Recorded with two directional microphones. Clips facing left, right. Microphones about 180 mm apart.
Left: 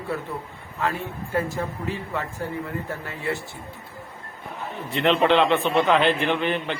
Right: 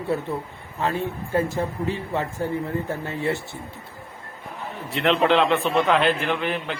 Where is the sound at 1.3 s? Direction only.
25° right (ahead or behind).